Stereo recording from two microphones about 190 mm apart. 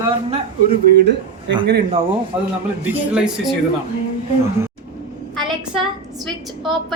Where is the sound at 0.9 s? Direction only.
65° right (ahead or behind).